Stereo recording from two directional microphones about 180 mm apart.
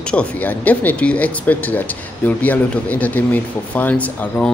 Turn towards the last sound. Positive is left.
turn(degrees=10)  # may be behind; listen again after turning